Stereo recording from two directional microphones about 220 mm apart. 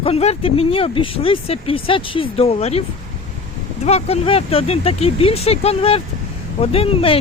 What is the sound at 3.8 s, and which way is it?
Speech, 30° left (ahead or behind).